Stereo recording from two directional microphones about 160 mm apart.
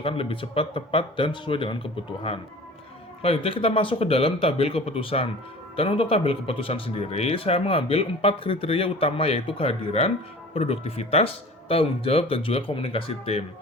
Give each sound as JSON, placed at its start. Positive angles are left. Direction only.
{"t": 0.0, "sound": "speech", "side_deg": 35}
{"t": 3.2, "sound": "speech", "side_deg": 40}